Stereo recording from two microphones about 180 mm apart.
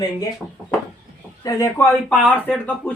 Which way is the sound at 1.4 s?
20° left (ahead or behind).